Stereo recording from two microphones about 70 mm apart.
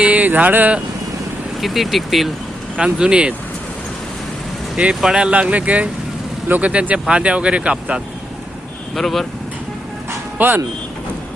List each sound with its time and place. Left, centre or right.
0.0 s speech: right
1.6 s speech: centre
2.7 s speech: centre
4.9 s speech: centre
9.0 s speech: centre
10.3 s speech: right